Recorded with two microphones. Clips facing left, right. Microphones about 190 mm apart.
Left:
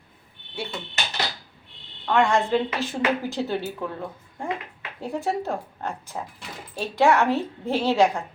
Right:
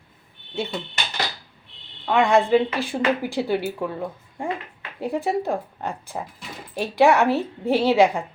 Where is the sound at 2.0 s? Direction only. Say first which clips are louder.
Right 3 dB; 15° right (ahead or behind).